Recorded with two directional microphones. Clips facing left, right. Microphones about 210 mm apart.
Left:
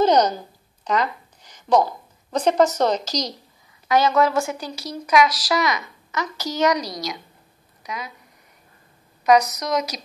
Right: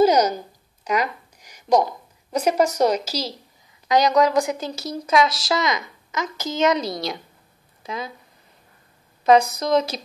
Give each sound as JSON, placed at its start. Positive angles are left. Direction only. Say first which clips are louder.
{"t": 0.0, "sound": "a woman's voice", "louder": "right 1 dB", "side_deg": -10}
{"t": 0.8, "sound": "a sound", "louder": "even", "side_deg": -10}
{"t": 2.3, "sound": "a woman's voice", "louder": "left 1 dB", "side_deg": -10}
{"t": 3.9, "sound": "a woman's voice", "louder": "right 1 dB", "side_deg": -15}
{"t": 9.2, "sound": "a woman's voice", "louder": "right 1 dB", "side_deg": -30}